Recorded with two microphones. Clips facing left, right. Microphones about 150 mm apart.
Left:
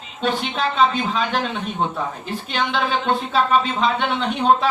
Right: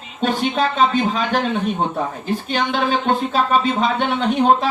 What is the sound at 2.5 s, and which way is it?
Speech, 45° right (ahead or behind).